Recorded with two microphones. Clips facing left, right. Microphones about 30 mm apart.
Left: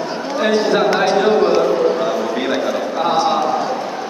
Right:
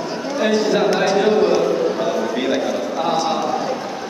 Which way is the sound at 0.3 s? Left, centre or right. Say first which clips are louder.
Left 2 dB; centre.